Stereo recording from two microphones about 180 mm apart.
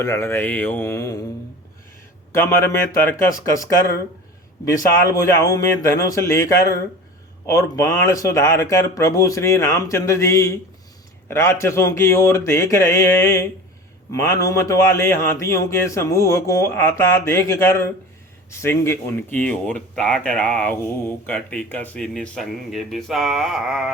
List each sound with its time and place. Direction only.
0.0 s speech: 15° left (ahead or behind)
2.3 s speech: 15° left (ahead or behind)
5.1 s speech: 20° left (ahead or behind)
7.4 s speech: 20° left (ahead or behind); by 23.9 s centre (ahead or behind)